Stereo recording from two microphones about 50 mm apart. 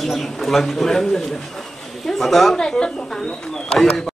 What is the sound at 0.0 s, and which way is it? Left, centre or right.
A man's voice, centre.